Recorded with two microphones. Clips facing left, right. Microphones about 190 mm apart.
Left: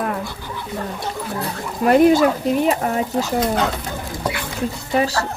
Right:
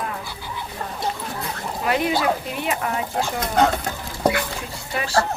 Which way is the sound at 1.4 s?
45° left (ahead or behind).